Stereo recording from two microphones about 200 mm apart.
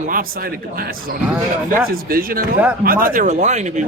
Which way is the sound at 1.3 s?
10° right (ahead or behind).